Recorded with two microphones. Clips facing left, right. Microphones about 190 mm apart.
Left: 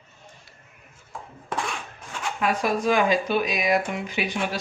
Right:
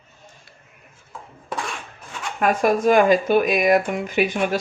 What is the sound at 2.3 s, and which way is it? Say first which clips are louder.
Speech: right 6 dB; 50° right (ahead or behind).